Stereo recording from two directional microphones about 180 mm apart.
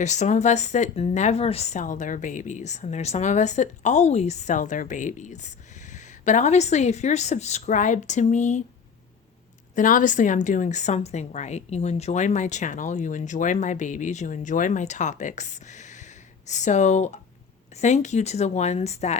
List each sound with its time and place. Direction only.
0.0 s a woman's voice: 40° left (ahead or behind)
9.7 s a woman's voice: 45° left (ahead or behind)